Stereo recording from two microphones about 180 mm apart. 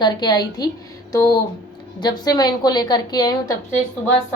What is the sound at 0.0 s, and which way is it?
A woman's voice, 25° left (ahead or behind).